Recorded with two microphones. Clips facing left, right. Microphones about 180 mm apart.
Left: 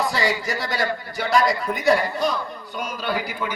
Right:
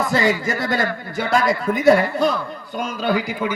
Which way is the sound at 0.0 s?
50° right (ahead or behind).